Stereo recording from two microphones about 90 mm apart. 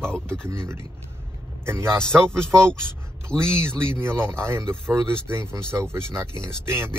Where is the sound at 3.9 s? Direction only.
25° right (ahead or behind).